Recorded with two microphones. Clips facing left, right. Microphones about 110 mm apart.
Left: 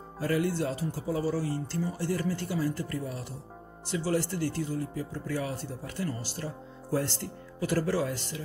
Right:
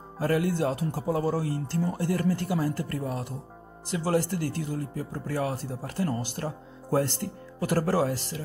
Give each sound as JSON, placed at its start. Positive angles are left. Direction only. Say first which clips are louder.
{"t": 0.2, "sound": "speech", "louder": "right 3 dB", "side_deg": -50}